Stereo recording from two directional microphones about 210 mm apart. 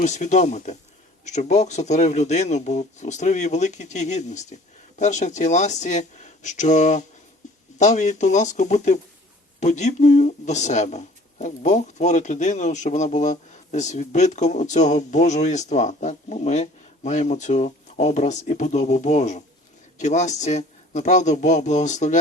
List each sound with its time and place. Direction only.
0.0 s speech: 35° left (ahead or behind)